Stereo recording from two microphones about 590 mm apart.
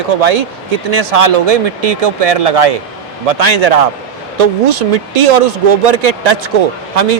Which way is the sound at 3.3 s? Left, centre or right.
Right.